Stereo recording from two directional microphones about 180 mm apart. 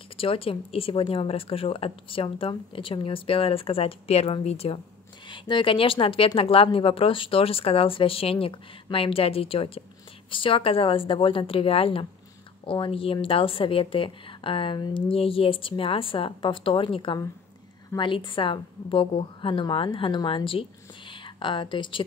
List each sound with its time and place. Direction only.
0.2 s a woman's voice: 30° left (ahead or behind)